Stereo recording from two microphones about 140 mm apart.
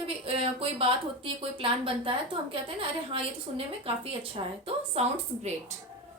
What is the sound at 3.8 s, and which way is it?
A woman's voice, 40° right (ahead or behind).